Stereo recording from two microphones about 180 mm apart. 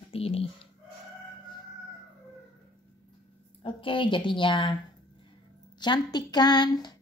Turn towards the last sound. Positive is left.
turn(degrees=25)  # may be behind; listen again after turning